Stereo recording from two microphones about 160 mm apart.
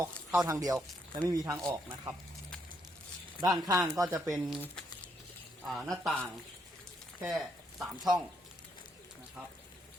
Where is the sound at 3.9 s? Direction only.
20° right (ahead or behind).